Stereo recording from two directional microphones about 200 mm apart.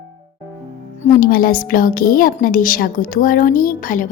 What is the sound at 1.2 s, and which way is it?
A woman's voice, 45° left (ahead or behind).